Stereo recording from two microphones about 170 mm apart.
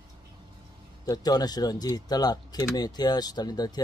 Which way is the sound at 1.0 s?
20° left (ahead or behind).